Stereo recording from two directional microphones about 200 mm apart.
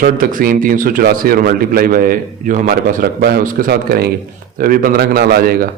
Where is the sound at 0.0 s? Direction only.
45° right (ahead or behind).